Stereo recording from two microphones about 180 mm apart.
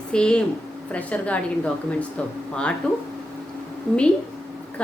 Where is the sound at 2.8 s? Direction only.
5° left (ahead or behind).